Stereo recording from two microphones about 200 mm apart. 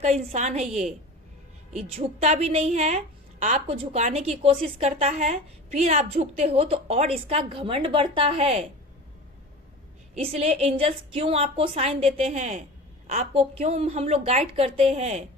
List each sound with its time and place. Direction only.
0.0 s a woman's voice: 35° right (ahead or behind)
1.7 s a woman's voice: 30° right (ahead or behind)
10.2 s a woman's voice: 30° right (ahead or behind)